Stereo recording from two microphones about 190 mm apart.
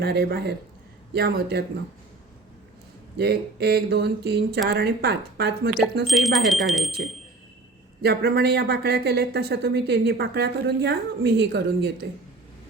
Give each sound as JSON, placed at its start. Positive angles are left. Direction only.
{"t": 0.0, "sound": "speech", "side_deg": -60}
{"t": 3.2, "sound": "speech", "side_deg": -60}
{"t": 6.1, "sound": "speech", "side_deg": 0}
{"t": 8.0, "sound": "speech", "side_deg": -55}